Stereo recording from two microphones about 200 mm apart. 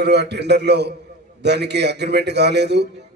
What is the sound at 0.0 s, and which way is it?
A man's voice, 60° right (ahead or behind).